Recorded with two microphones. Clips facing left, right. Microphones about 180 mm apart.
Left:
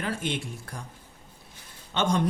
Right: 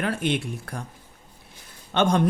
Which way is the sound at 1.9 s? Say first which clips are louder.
Right 5 dB; 60° right (ahead or behind).